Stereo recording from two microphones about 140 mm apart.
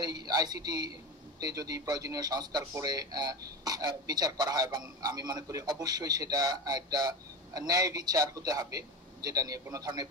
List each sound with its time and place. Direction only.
0.0 s a man's voice: 30° right (ahead or behind)